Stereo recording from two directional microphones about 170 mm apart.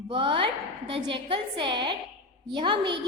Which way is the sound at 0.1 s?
30° right (ahead or behind).